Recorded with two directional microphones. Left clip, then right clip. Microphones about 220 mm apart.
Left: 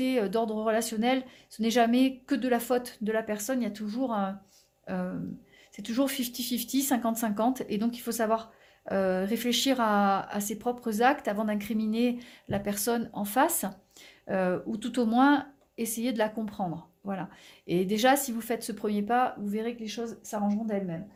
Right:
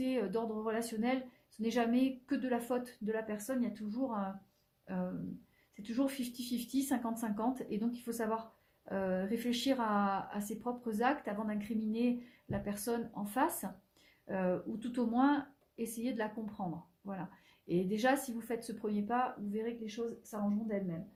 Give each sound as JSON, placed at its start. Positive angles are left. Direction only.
{"t": 0.0, "sound": "speech", "side_deg": 40}
{"t": 17.7, "sound": "speech", "side_deg": 45}